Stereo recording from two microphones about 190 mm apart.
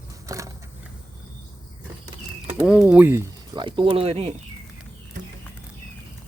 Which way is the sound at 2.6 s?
5° right (ahead or behind).